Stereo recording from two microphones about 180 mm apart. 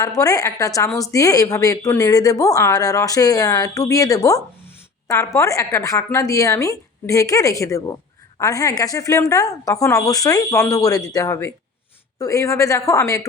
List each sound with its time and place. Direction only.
0.0 s a woman's voice: 20° left (ahead or behind)